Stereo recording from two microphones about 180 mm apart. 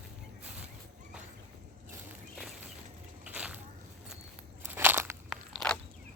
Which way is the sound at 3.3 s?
10° right (ahead or behind).